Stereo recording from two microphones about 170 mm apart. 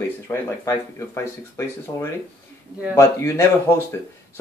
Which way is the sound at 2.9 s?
15° left (ahead or behind).